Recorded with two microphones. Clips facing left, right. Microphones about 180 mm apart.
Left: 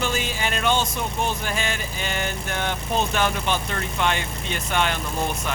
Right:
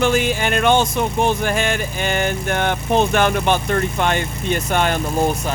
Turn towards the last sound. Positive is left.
turn(degrees=-40)  # may be behind; listen again after turning